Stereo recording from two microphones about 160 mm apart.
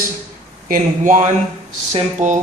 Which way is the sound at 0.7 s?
50° right (ahead or behind).